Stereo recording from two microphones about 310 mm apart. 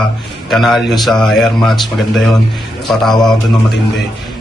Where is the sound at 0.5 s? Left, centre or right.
Centre.